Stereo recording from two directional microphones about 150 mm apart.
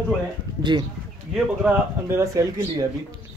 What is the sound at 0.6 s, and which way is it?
Speech, 30° right (ahead or behind).